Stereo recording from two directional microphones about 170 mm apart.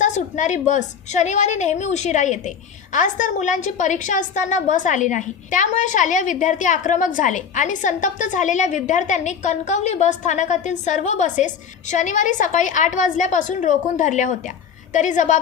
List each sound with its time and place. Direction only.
0.0 s a woman's voice: 45° left (ahead or behind)